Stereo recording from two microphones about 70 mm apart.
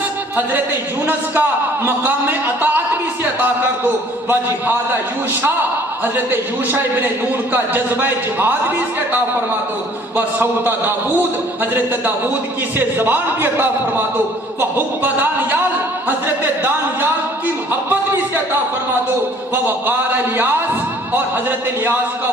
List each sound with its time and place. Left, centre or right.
0.3 s a man's voice: right
4.3 s a man's voice: right
10.2 s a man's voice: right
19.6 s a man's voice: right